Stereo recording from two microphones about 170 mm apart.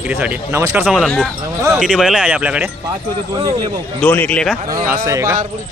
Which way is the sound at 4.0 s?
10° left (ahead or behind).